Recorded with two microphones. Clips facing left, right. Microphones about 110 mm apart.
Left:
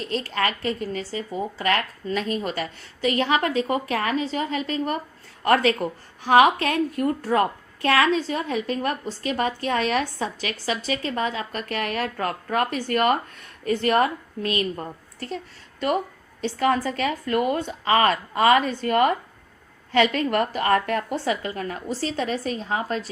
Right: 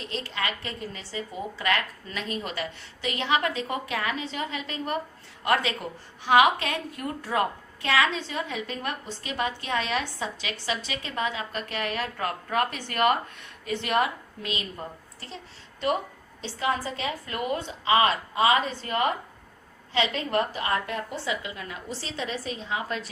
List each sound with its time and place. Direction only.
0.1 s a woman's voice: 45° left (ahead or behind)
6.2 s a woman's voice: 45° left (ahead or behind)
16.4 s a woman's voice: 55° left (ahead or behind)